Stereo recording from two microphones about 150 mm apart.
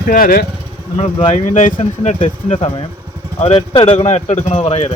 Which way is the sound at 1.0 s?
45° left (ahead or behind).